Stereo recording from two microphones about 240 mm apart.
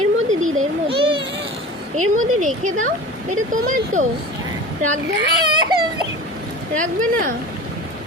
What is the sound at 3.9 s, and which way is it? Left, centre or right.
Speech, right.